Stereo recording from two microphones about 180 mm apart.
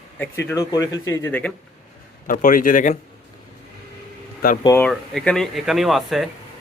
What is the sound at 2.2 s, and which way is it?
Speech, 50° left (ahead or behind).